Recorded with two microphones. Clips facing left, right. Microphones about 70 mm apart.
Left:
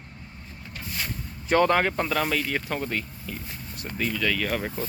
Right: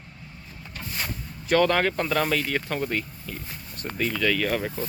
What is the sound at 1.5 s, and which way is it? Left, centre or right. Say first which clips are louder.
Speech: even; left.